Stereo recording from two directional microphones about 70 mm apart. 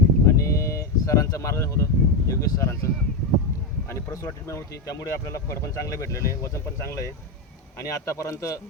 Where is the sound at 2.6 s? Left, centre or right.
Left.